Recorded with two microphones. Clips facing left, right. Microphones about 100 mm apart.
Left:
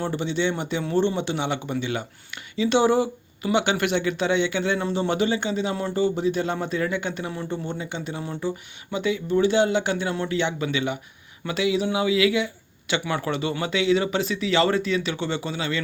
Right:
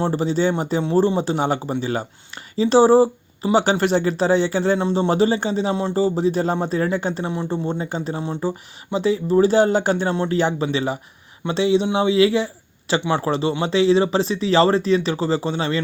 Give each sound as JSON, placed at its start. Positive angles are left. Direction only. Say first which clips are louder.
{"t": 0.0, "sound": "speech", "louder": "right 5 dB", "side_deg": -35}